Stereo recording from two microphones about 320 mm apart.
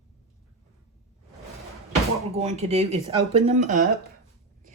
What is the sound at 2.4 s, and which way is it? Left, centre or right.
Speech, centre.